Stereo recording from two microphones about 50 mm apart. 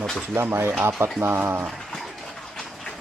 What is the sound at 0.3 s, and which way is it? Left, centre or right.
Speech, right.